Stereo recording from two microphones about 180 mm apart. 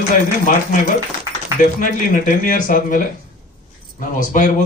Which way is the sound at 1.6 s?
50° left (ahead or behind).